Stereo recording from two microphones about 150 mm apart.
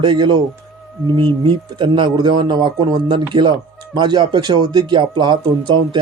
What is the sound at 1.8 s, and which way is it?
A man's voice, 30° right (ahead or behind).